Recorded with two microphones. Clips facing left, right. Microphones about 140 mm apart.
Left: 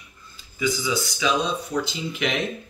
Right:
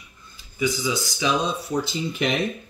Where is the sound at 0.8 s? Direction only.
25° right (ahead or behind).